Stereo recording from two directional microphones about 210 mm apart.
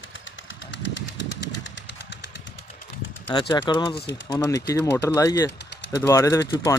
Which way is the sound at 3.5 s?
15° left (ahead or behind).